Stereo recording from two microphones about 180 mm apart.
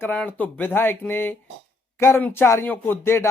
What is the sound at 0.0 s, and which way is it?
Speech, 10° left (ahead or behind).